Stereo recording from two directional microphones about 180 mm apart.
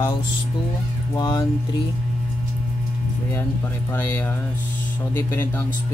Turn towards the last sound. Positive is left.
turn(degrees=15)  # may be behind; listen again after turning